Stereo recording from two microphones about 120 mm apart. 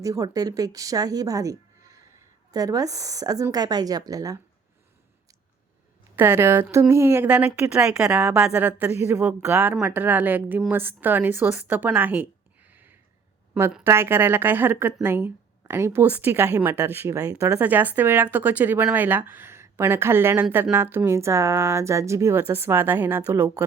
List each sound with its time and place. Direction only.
0.0 s a woman's voice: 30° right (ahead or behind)
6.1 s a woman's voice: 20° right (ahead or behind)
7.3 s a woman's voice: 10° right (ahead or behind)
12.7 s a sound: 15° right (ahead or behind)
13.8 s a woman's voice: 20° right (ahead or behind)